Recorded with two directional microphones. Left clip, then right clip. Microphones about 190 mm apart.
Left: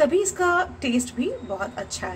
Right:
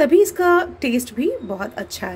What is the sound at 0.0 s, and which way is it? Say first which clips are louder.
A woman's voice: right 6 dB; 30° right (ahead or behind).